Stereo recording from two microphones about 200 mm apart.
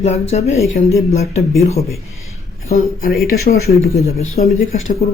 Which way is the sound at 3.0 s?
50° left (ahead or behind).